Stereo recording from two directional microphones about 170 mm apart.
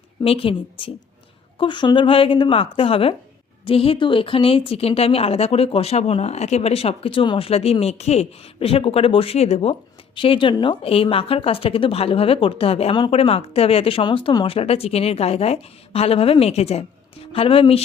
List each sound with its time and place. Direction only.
0.2 s speech: 30° left (ahead or behind)